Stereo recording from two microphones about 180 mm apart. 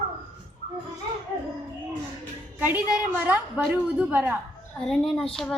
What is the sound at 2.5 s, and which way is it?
A woman's voice, 10° right (ahead or behind).